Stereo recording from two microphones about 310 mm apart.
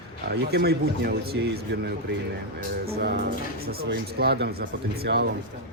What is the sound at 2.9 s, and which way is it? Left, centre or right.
Speech, right.